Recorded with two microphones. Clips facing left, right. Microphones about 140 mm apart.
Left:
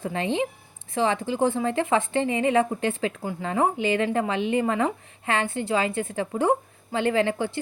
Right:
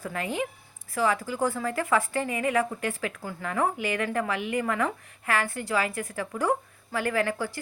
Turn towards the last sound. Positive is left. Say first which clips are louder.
# left 4 dB
turn(degrees=25)  # may be behind; listen again after turning